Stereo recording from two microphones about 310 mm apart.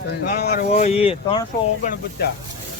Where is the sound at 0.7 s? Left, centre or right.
Centre.